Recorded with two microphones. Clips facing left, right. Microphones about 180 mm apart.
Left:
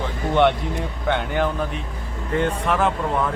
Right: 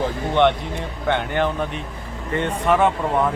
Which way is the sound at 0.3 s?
Centre (ahead or behind).